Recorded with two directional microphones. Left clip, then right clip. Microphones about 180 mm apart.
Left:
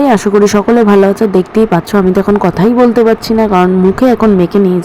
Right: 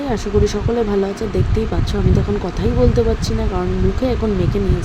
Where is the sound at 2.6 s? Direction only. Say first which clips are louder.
Left 11 dB; 40° left (ahead or behind).